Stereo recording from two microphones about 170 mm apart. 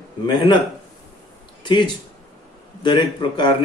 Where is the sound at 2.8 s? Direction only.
25° left (ahead or behind).